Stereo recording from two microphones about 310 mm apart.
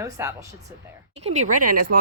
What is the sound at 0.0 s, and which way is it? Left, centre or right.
Speech, centre.